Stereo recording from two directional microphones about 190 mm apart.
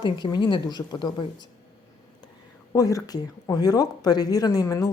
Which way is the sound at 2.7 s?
15° left (ahead or behind).